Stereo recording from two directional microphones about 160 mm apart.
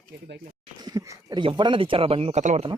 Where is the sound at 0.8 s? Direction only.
25° right (ahead or behind); by 2.7 s 45° right (ahead or behind).